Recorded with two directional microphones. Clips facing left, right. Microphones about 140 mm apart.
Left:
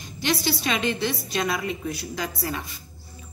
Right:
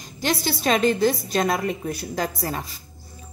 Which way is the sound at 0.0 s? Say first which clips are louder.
Right 1 dB; 45° right (ahead or behind).